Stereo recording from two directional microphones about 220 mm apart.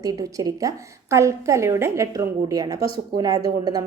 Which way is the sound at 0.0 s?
15° right (ahead or behind).